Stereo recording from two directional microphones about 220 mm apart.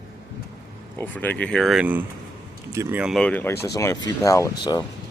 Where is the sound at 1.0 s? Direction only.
5° left (ahead or behind).